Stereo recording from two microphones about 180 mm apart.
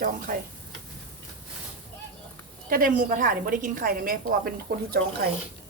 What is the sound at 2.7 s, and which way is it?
A woman's voice, 50° right (ahead or behind).